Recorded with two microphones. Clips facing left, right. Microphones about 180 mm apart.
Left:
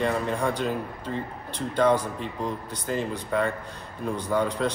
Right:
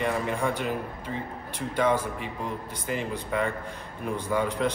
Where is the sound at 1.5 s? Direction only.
10° right (ahead or behind).